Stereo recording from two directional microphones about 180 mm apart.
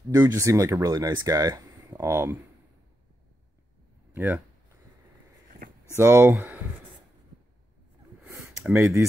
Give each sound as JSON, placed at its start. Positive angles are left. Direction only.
{"t": 0.1, "sound": "speech", "side_deg": -15}
{"t": 4.1, "sound": "speech", "side_deg": -10}
{"t": 5.9, "sound": "speech", "side_deg": -15}
{"t": 8.2, "sound": "a sound", "side_deg": 0}
{"t": 8.7, "sound": "speech", "side_deg": -15}